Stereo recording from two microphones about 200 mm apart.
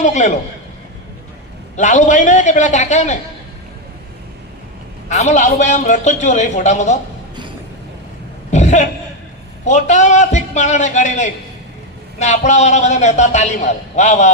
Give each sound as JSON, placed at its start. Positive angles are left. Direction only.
{"t": 0.0, "sound": "a man's voice", "side_deg": 35}
{"t": 1.7, "sound": "a man's voice", "side_deg": 35}
{"t": 5.0, "sound": "a man's voice", "side_deg": 35}
{"t": 8.4, "sound": "a sound", "side_deg": 35}
{"t": 9.6, "sound": "a man's voice", "side_deg": 35}